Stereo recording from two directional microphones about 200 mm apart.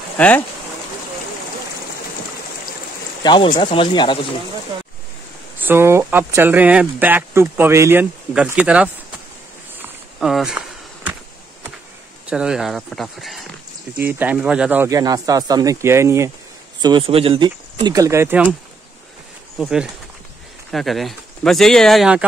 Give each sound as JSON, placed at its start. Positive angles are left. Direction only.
{"t": 0.2, "sound": "speech", "side_deg": 5}
{"t": 3.2, "sound": "a sound", "side_deg": 20}
{"t": 3.5, "sound": "speech", "side_deg": 25}
{"t": 5.6, "sound": "speech", "side_deg": -10}
{"t": 9.8, "sound": "walk", "side_deg": 0}
{"t": 12.3, "sound": "speech", "side_deg": -5}
{"t": 16.8, "sound": "speech", "side_deg": -25}
{"t": 19.6, "sound": "speech", "side_deg": -5}